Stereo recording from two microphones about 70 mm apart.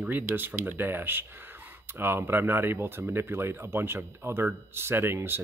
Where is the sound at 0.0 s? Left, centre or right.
Right.